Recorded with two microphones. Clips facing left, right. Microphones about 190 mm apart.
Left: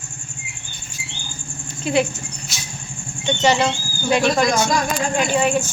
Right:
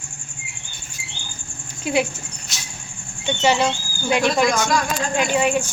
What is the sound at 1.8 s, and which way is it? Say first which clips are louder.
Speech: left 2 dB; 10° right (ahead or behind).